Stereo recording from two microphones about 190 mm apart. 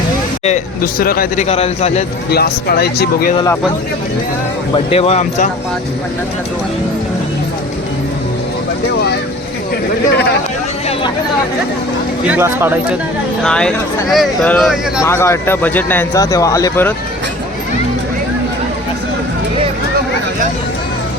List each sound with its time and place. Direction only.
0.4 s speech: 45° left (ahead or behind)
1.5 s speech: 35° left (ahead or behind)
2.3 s speech: 55° left (ahead or behind)
3.3 s speech: 15° left (ahead or behind)
4.7 s speech: 30° left (ahead or behind)
12.3 s speech: 10° right (ahead or behind)
13.4 s speech: 5° left (ahead or behind)
15.0 s speech: 15° left (ahead or behind)